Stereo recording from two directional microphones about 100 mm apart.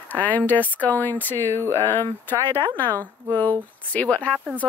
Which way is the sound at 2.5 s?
55° right (ahead or behind).